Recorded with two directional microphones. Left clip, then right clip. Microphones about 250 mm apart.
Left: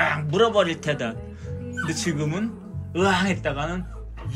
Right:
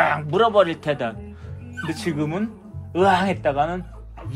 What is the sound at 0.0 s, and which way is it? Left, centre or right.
Speech, centre.